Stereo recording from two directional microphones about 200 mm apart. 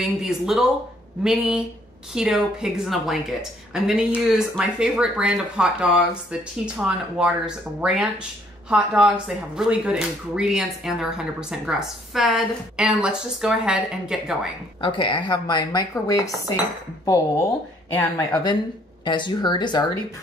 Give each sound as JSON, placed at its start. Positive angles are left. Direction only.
{"t": 0.0, "sound": "speech", "side_deg": 0}
{"t": 14.8, "sound": "speech", "side_deg": 25}